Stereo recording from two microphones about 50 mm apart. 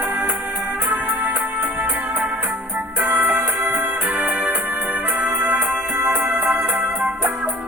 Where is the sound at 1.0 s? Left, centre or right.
Right.